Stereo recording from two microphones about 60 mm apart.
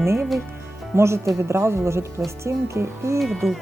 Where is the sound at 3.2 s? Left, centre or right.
Centre.